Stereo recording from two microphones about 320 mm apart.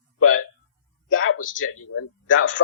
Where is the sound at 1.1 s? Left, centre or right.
Left.